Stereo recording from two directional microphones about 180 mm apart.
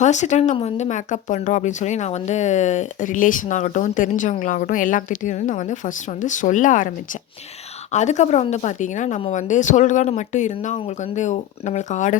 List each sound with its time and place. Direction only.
0.0 s speech: 40° left (ahead or behind)